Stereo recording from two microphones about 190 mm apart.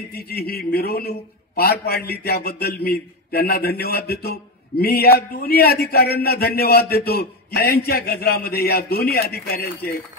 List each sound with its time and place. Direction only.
0.1 s a man's voice: 55° left (ahead or behind)